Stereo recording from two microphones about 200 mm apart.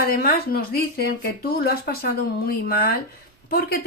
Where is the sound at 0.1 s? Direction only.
50° left (ahead or behind).